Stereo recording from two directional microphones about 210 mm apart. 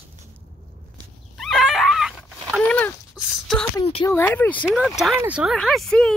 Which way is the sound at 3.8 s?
25° left (ahead or behind).